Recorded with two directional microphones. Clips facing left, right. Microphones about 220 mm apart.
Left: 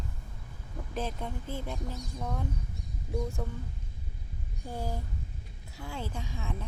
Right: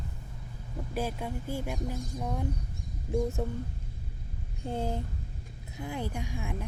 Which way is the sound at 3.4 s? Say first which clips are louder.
Right 5 dB; 25° right (ahead or behind).